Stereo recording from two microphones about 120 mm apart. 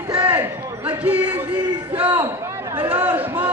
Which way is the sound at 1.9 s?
50° right (ahead or behind).